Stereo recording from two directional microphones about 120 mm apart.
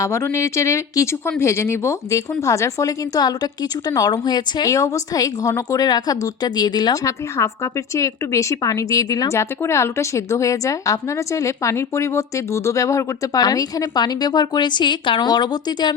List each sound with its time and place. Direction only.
0.0 s speech: 25° left (ahead or behind)